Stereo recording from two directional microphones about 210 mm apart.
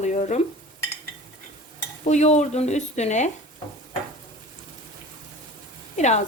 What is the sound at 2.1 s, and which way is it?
A woman's voice, 35° left (ahead or behind).